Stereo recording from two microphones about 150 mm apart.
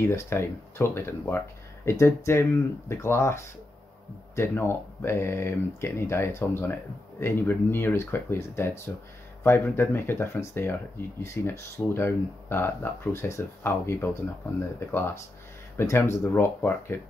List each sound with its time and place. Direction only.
0.1 s speech: 15° left (ahead or behind)